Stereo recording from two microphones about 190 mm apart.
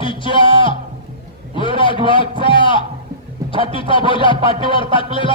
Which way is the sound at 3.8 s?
25° left (ahead or behind).